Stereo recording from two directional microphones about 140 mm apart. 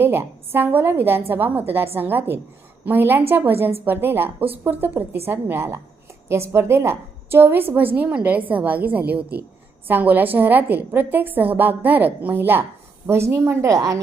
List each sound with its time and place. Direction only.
0.0 s a woman's voice: 15° right (ahead or behind)